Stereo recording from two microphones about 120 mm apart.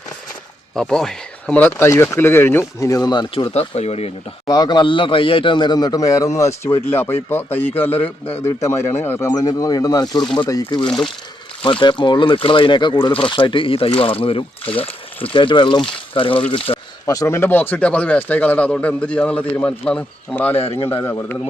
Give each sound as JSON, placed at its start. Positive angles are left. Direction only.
{"t": 0.8, "sound": "speech", "side_deg": 5}
{"t": 1.6, "sound": "speech", "side_deg": 20}
{"t": 3.5, "sound": "speech", "side_deg": 60}
{"t": 4.4, "sound": "a man's voice", "side_deg": 35}
{"t": 9.3, "sound": "a man's voice", "side_deg": 30}
{"t": 10.2, "sound": "speech", "side_deg": 10}
{"t": 10.5, "sound": "a man's voice", "side_deg": 35}
{"t": 10.8, "sound": "speech", "side_deg": 5}
{"t": 11.6, "sound": "speech", "side_deg": 45}
{"t": 17.1, "sound": "speech", "side_deg": 25}
{"t": 20.6, "sound": "speech", "side_deg": 55}
{"t": 20.9, "sound": "speech", "side_deg": 20}